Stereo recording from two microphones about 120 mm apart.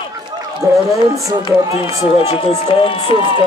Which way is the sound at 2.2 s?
55° left (ahead or behind).